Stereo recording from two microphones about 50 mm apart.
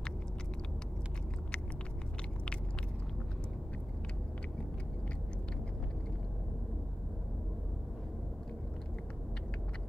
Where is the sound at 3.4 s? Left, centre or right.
Left.